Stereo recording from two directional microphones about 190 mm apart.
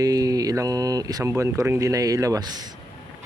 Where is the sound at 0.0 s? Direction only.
20° right (ahead or behind).